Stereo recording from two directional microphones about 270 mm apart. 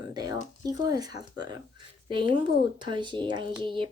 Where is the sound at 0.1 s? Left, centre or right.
Centre.